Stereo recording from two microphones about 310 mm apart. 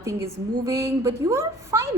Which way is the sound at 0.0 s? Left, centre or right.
Centre.